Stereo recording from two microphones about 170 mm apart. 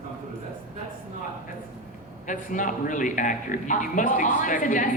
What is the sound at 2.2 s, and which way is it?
A man's voice, 50° left (ahead or behind).